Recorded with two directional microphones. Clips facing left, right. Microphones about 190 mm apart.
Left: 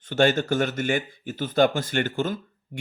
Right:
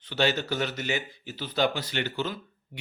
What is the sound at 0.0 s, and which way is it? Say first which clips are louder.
A man's voice: left 6 dB; 50° left (ahead or behind).